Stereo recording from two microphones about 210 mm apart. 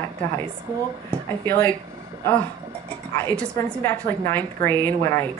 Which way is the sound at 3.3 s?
5° left (ahead or behind).